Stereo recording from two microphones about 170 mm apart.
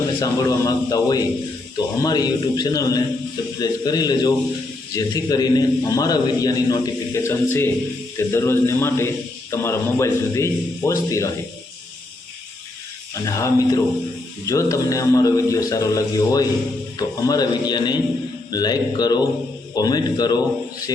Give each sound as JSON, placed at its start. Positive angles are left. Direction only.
{"t": 0.2, "sound": "a man's voice", "side_deg": 20}
{"t": 13.2, "sound": "a man's voice", "side_deg": 20}